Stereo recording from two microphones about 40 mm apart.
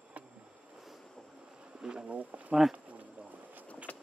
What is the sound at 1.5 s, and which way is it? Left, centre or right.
Insect, right.